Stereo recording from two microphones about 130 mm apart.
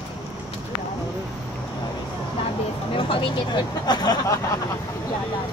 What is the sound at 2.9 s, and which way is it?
Vehicle, 45° left (ahead or behind).